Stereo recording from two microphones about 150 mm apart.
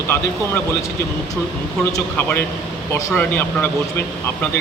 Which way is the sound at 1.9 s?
15° left (ahead or behind).